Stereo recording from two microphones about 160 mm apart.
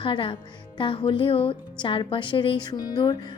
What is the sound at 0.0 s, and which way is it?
Speech, 30° left (ahead or behind).